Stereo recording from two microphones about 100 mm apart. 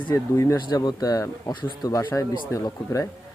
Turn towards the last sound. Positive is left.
turn(degrees=30)  # may be behind; listen again after turning